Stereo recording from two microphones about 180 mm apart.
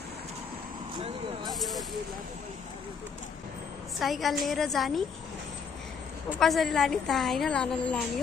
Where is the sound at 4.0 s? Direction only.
Centre (ahead or behind).